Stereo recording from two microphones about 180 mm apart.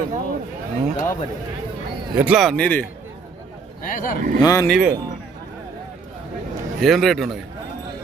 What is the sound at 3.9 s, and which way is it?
Speech, 50° left (ahead or behind).